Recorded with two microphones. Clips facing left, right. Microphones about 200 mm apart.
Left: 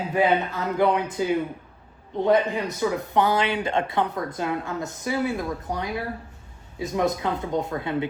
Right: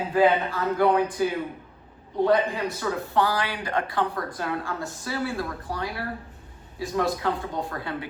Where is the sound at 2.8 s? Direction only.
20° left (ahead or behind).